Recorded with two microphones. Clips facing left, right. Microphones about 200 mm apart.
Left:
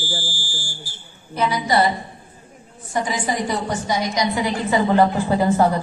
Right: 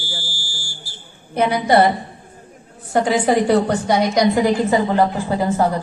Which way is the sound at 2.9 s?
65° right (ahead or behind).